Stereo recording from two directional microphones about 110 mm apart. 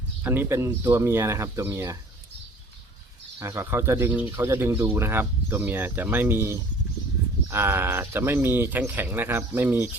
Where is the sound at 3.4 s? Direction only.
25° right (ahead or behind).